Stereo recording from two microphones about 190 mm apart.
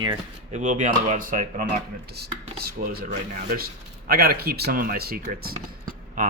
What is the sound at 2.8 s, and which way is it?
Speech, 40° right (ahead or behind).